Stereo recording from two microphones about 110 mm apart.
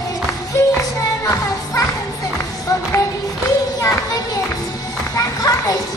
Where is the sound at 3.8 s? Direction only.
35° left (ahead or behind).